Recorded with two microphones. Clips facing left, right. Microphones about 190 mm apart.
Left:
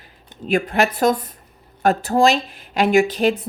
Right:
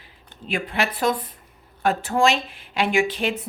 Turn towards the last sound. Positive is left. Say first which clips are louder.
# left 6 dB
turn(degrees=40)  # may be behind; listen again after turning